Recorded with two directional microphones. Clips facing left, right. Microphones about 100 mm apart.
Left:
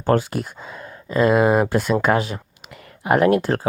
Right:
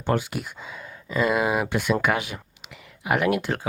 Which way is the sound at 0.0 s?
40° left (ahead or behind).